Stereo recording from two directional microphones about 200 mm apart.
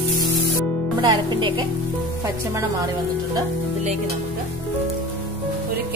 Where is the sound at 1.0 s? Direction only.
20° right (ahead or behind).